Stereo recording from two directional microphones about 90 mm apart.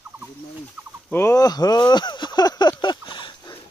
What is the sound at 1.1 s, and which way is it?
Speech, 30° left (ahead or behind).